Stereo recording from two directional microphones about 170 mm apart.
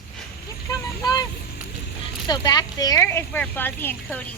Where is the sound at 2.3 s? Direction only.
25° left (ahead or behind).